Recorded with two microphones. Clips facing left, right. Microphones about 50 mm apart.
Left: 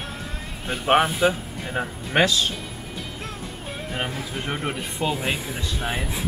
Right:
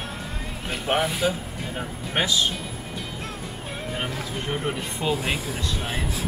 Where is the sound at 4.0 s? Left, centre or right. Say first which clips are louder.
Left 3 dB; centre.